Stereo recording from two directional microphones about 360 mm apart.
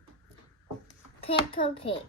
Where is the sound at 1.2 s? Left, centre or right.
Centre.